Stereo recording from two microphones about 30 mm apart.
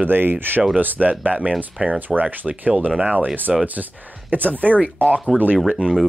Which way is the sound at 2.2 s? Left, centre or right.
Right.